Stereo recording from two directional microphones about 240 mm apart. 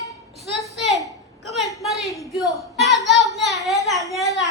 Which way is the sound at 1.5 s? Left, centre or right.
Centre.